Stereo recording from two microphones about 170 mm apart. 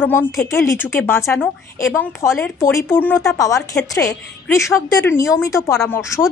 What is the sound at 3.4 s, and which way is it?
A woman's voice, 20° left (ahead or behind).